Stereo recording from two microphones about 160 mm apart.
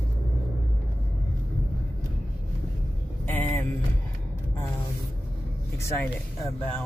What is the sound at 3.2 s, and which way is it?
Vehicle, 10° left (ahead or behind).